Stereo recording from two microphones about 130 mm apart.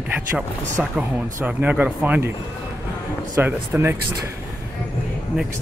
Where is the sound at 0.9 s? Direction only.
10° right (ahead or behind).